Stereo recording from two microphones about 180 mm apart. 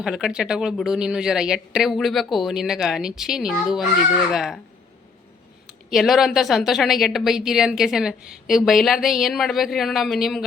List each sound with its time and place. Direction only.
0.0 s a woman's voice: 5° right (ahead or behind)
5.6 s a woman's voice: centre (ahead or behind)